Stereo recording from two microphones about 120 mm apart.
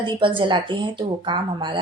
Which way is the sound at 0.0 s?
45° right (ahead or behind).